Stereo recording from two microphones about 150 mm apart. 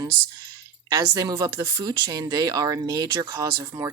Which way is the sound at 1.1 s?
25° right (ahead or behind).